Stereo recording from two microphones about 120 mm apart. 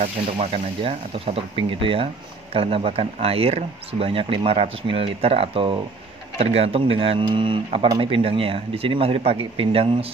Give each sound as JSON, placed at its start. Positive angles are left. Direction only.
{"t": 0.0, "sound": "speech", "side_deg": -60}